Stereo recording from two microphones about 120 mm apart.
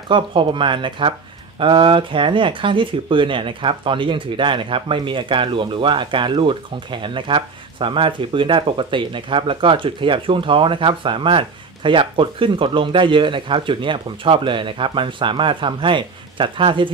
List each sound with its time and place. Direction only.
0.1 s speech: 45° right (ahead or behind)